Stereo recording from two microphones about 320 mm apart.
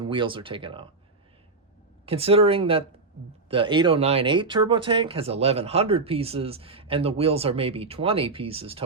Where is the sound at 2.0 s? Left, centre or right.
Centre.